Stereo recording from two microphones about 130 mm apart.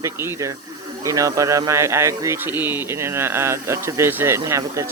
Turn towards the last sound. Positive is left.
turn(degrees=-20)  # may be behind; listen again after turning